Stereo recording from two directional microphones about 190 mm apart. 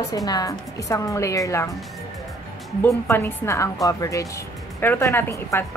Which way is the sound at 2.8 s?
10° left (ahead or behind).